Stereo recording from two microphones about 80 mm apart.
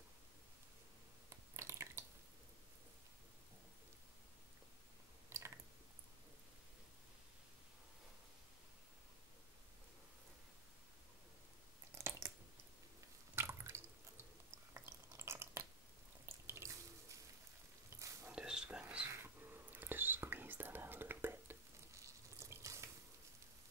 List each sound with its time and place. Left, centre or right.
1.3 s chewing: right
5.3 s a sound: right
12.0 s a sound: right
13.3 s water: right
14.7 s drip: right
16.3 s water: right
17.8 s frying: right
18.3 s whispering: centre
19.0 s whispering: right
21.9 s water tap: right